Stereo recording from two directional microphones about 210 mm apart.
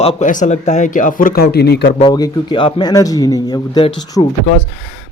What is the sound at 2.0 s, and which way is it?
A man's voice, 20° left (ahead or behind).